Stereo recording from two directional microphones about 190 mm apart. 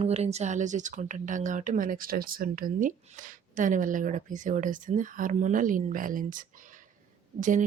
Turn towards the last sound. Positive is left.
turn(degrees=-40)  # may be behind; listen again after turning